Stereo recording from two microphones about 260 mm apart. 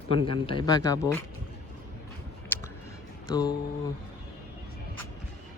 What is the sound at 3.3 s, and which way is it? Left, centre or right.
Speech, centre.